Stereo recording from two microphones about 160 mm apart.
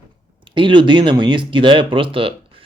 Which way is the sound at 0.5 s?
30° right (ahead or behind).